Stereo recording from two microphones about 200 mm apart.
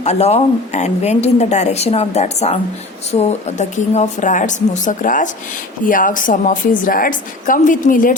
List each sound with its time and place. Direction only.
0.0 s a woman's voice: 35° left (ahead or behind)